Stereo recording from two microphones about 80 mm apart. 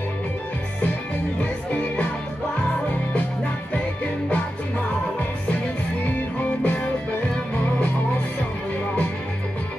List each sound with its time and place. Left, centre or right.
6.6 s music: centre